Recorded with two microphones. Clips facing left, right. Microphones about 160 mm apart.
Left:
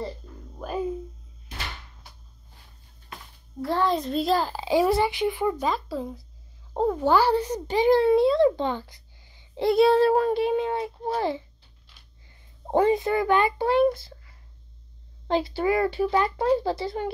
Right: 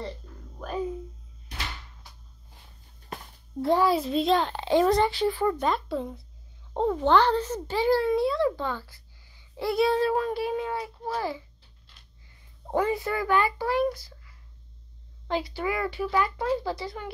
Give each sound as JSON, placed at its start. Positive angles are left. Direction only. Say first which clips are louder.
{"t": 3.6, "sound": "a child's voice", "louder": "right 2 dB", "side_deg": -10}
{"t": 5.6, "sound": "a child's voice", "louder": "even", "side_deg": 0}
{"t": 12.7, "sound": "a child's voice", "louder": "left 5 dB", "side_deg": 25}